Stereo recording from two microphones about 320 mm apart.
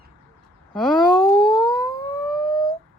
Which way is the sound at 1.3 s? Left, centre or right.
Centre.